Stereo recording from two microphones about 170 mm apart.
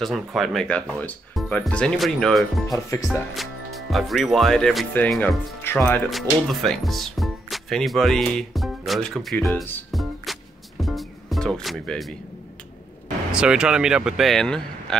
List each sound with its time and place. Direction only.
0.0 s speech: centre (ahead or behind)
2.7 s speech: 20° left (ahead or behind)
3.1 s speech: centre (ahead or behind)
6.0 s speech: centre (ahead or behind)
9.8 s music: centre (ahead or behind)
13.3 s speech: 5° right (ahead or behind)